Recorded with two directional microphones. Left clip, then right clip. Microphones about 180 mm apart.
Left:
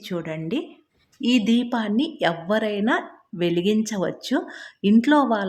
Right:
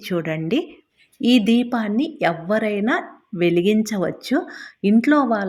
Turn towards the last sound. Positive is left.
turn(degrees=-5)  # may be behind; listen again after turning